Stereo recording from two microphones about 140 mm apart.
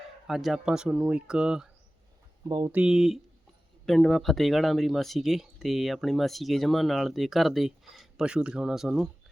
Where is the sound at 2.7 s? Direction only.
5° right (ahead or behind).